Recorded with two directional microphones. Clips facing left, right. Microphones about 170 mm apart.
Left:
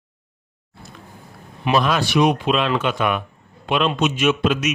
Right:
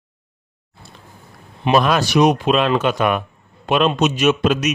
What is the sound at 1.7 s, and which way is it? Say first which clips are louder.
A man's voice: right 3 dB; 45° right (ahead or behind).